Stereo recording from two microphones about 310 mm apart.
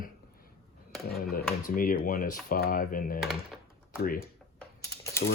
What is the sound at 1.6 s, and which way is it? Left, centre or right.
Speech, left.